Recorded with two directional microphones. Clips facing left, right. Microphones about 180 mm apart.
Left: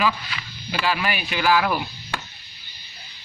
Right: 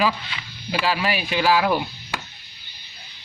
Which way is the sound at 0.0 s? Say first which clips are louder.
Right 1 dB; 25° right (ahead or behind).